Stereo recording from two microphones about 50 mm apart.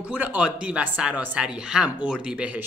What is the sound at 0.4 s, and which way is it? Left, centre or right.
Speech, right.